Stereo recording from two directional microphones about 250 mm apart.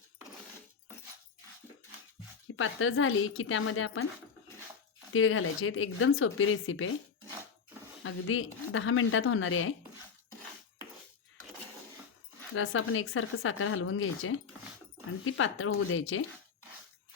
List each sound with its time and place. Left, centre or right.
2.6 s speech: left
5.1 s speech: left
8.0 s speech: left
12.5 s speech: left